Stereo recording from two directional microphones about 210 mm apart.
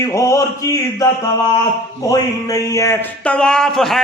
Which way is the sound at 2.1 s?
15° left (ahead or behind).